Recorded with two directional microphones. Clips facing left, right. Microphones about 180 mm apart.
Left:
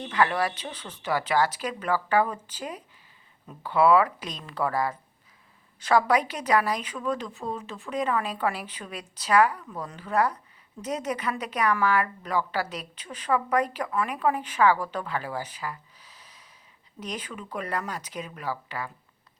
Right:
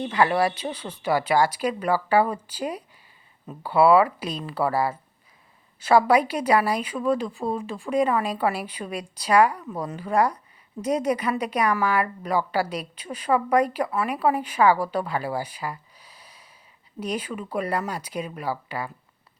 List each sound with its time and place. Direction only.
0.0 s a woman's voice: 10° right (ahead or behind)
6.1 s a woman's voice: 10° right (ahead or behind)
7.3 s speech: 35° right (ahead or behind)
7.9 s a woman's voice: 10° right (ahead or behind)
16.0 s gasp: 10° right (ahead or behind)
17.0 s a woman's voice: 10° right (ahead or behind)